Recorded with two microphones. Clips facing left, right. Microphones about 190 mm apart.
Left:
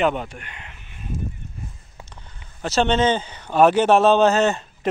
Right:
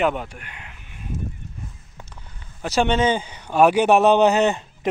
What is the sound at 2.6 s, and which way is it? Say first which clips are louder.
A man's voice: left 1 dB; 10° right (ahead or behind).